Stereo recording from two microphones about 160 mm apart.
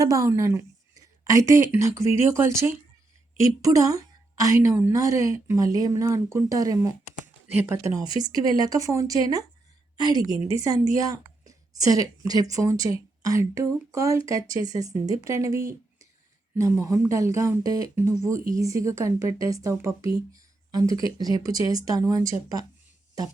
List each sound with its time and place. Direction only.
0.0 s a woman's voice: 20° right (ahead or behind)